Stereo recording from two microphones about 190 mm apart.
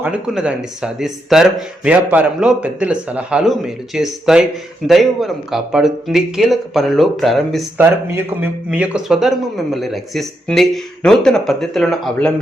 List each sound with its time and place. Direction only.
0.0 s speech: 5° right (ahead or behind)
7.8 s speech: 10° right (ahead or behind)